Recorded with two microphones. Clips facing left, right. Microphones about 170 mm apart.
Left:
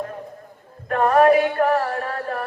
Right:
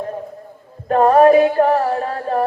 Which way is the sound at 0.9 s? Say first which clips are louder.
Right 5 dB; 30° right (ahead or behind).